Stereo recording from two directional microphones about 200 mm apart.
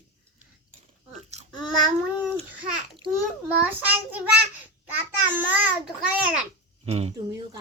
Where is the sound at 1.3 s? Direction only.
35° right (ahead or behind).